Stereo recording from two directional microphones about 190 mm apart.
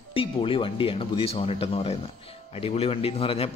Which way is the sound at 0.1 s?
30° left (ahead or behind).